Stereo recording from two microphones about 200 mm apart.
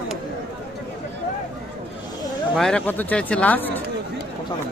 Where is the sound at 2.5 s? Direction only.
5° left (ahead or behind).